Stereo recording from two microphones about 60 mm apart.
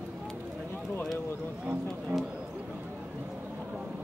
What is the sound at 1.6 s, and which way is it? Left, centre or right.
Speech, right.